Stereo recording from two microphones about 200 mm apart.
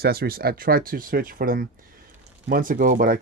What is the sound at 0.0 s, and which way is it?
Speech, 50° right (ahead or behind).